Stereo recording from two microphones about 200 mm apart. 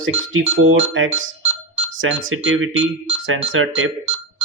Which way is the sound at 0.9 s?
80° right.